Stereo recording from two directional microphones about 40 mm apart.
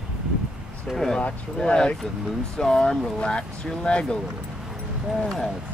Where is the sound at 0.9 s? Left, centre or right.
Centre.